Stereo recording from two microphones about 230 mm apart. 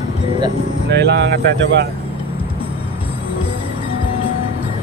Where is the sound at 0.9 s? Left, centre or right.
Right.